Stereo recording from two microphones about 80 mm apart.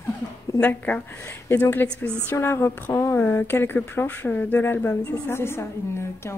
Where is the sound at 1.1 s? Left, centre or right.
Left.